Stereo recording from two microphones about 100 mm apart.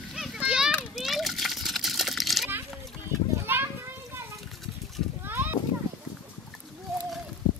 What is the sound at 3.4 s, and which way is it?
Children playing, 25° right (ahead or behind).